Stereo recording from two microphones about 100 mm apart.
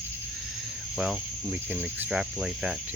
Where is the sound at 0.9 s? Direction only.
5° right (ahead or behind).